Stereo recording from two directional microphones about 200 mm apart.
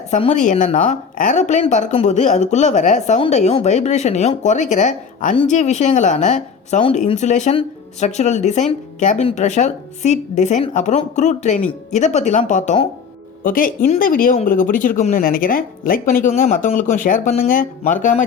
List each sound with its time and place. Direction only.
0.1 s speech: 35° left (ahead or behind)
13.4 s speech: 45° left (ahead or behind)